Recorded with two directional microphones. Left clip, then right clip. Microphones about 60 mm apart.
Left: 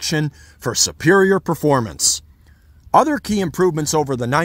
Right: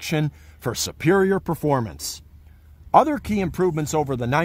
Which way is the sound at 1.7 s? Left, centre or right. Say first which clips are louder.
Left 4 dB; left.